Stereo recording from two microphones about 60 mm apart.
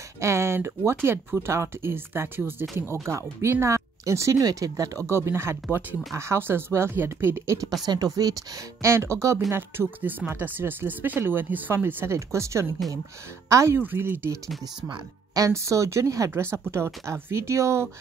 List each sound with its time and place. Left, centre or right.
0.2 s speech: right
2.9 s speech: right
5.0 s speech: right
7.8 s speech: right
8.8 s speech: right
9.5 s speech: right
12.3 s speech: right
13.7 s speech: right
15.5 s speech: right
16.3 s speech: right